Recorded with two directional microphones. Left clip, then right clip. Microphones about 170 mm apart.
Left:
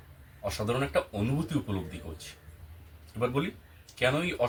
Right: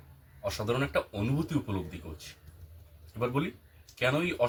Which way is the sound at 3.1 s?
5° right (ahead or behind).